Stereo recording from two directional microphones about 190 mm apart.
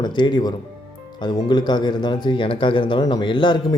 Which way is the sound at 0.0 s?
25° left (ahead or behind).